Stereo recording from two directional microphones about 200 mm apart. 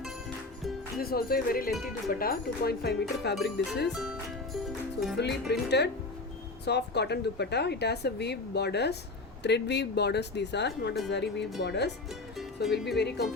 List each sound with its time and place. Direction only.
0.9 s speech: 50° left (ahead or behind)
3.9 s speech: centre (ahead or behind)
5.1 s speech: 55° left (ahead or behind)